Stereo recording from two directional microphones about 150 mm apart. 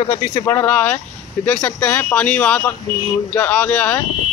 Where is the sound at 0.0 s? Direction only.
35° left (ahead or behind).